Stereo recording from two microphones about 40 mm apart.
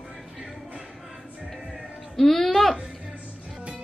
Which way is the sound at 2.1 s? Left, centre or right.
Centre.